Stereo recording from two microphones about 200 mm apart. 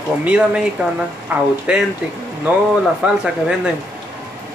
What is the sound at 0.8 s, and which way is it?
A woman's voice, 5° right (ahead or behind).